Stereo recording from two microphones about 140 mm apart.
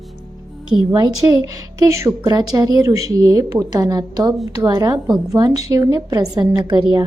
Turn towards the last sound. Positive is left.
turn(degrees=-30)  # may be behind; listen again after turning